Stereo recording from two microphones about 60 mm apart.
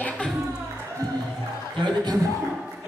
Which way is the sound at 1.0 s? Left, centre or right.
Right.